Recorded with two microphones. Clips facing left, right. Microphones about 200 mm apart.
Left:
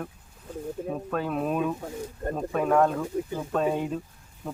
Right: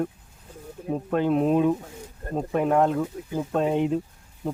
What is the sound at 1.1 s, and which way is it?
Speech, 25° right (ahead or behind).